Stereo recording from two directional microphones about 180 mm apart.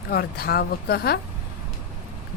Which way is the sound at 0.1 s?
60° left (ahead or behind).